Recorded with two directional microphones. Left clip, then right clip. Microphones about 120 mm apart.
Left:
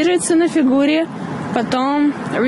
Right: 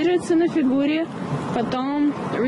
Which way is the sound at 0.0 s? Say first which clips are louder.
Left 4 dB; 50° left (ahead or behind).